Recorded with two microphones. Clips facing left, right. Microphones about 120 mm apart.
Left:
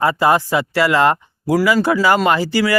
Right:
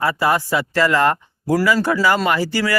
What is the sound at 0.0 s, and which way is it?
Speech, 20° left (ahead or behind).